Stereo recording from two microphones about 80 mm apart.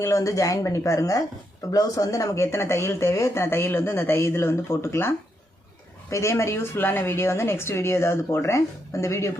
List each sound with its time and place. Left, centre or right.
0.0 s speech: left